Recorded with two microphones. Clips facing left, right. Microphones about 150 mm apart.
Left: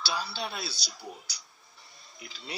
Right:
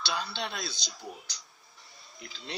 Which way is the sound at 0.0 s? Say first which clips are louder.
Even; 5° left (ahead or behind).